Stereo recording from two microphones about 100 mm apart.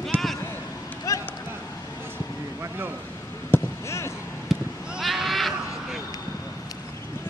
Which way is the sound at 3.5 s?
25° left (ahead or behind).